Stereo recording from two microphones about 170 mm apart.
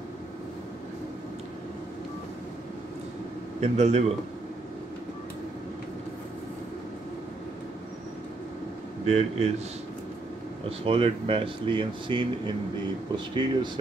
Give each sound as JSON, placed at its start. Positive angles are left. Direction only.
{"t": 3.6, "sound": "speech", "side_deg": -40}
{"t": 9.0, "sound": "speech", "side_deg": -40}
{"t": 10.9, "sound": "speech", "side_deg": -35}